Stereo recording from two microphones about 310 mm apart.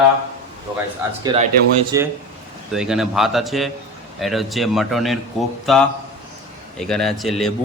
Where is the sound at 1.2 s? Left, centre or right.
Centre.